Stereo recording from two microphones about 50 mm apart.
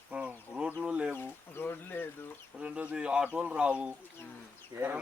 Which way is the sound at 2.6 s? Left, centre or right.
Right.